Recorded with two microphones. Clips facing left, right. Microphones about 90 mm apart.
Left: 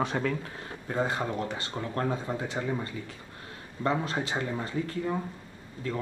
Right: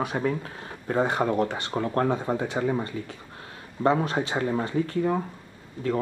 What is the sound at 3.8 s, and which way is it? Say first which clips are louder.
Speech: right 6 dB; 25° right (ahead or behind).